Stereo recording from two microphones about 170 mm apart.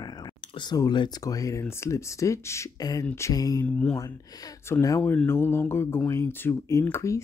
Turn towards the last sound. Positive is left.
turn(degrees=15)  # may be behind; listen again after turning